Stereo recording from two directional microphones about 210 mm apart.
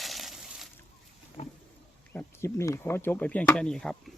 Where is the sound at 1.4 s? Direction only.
30° left (ahead or behind).